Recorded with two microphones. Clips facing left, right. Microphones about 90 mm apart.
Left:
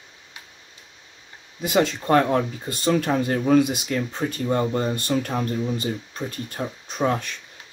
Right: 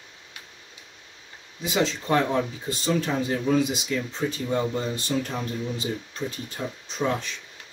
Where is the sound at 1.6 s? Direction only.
55° left (ahead or behind).